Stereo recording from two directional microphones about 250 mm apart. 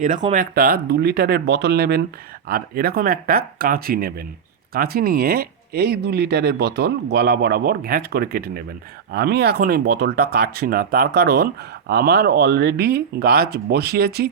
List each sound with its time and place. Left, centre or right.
0.2 s speech: right